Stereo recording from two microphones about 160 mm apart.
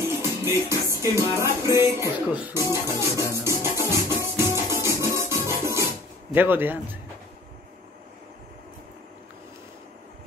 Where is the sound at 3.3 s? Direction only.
15° right (ahead or behind).